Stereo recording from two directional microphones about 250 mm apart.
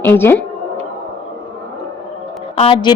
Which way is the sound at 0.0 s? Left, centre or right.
Centre.